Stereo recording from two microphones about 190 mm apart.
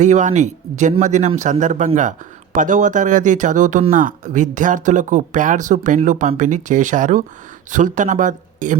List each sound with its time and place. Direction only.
0.0 s speech: 40° right (ahead or behind)